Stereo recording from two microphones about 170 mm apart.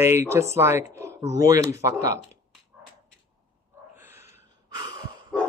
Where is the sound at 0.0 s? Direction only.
15° right (ahead or behind).